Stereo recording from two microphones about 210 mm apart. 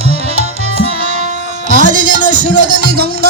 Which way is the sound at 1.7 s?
35° right (ahead or behind).